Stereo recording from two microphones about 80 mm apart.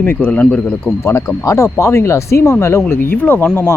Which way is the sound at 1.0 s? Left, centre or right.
Left.